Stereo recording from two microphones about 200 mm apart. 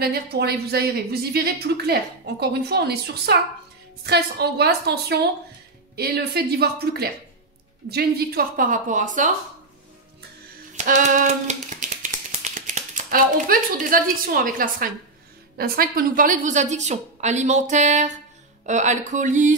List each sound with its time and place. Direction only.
0.0 s a woman's voice: 50° right (ahead or behind)
10.8 s a sound: 35° right (ahead or behind)
15.5 s a woman's voice: 50° right (ahead or behind)